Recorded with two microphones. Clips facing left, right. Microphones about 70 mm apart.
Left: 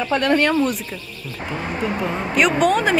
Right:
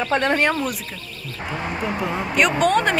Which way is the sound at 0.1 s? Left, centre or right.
Right.